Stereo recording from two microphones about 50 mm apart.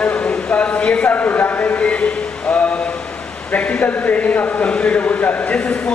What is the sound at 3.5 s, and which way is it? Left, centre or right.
Speech, left.